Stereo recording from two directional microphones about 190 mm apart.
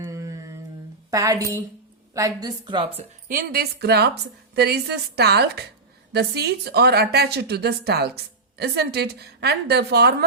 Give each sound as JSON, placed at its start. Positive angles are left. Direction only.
{"t": 0.0, "sound": "humming", "side_deg": -15}
{"t": 1.1, "sound": "a woman's voice", "side_deg": -20}
{"t": 3.2, "sound": "a woman's voice", "side_deg": -50}